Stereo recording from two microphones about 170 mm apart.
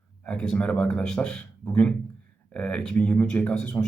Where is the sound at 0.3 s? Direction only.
5° left (ahead or behind).